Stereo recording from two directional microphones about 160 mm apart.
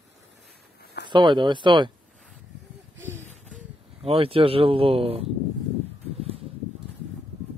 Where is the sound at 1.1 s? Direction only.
30° right (ahead or behind).